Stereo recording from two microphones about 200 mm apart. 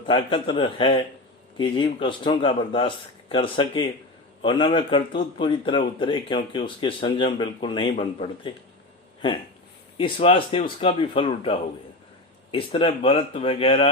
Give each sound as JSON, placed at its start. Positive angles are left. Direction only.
{"t": 0.0, "sound": "speech", "side_deg": 25}
{"t": 10.0, "sound": "speech", "side_deg": 30}